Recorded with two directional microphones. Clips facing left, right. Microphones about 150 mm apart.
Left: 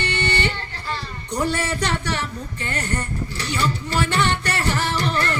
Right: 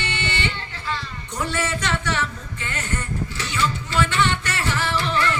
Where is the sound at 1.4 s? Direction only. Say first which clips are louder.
Left 2 dB; 35° left (ahead or behind).